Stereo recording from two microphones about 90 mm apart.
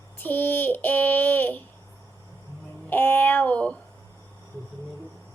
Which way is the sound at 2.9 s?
20° left (ahead or behind).